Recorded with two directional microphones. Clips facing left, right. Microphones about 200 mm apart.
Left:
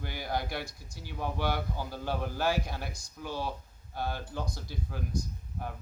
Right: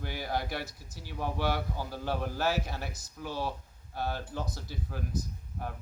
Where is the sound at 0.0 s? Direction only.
5° right (ahead or behind).